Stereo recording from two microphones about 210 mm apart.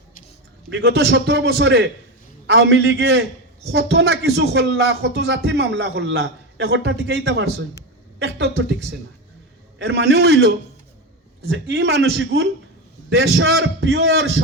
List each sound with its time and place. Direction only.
0.7 s a man's voice: 55° right (ahead or behind)